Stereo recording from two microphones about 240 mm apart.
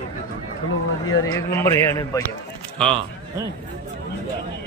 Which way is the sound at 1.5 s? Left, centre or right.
Centre.